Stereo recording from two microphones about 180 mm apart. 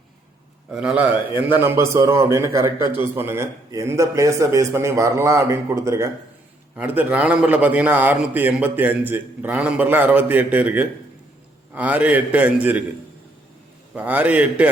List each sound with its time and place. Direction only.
0.7 s a man's voice: 5° right (ahead or behind)
13.9 s a man's voice: 10° right (ahead or behind)